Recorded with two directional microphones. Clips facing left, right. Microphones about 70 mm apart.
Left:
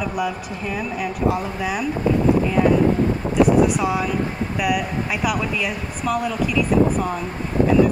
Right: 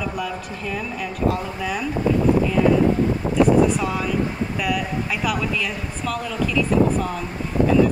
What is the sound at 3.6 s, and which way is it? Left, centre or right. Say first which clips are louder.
A woman's voice: left 1 dB; centre.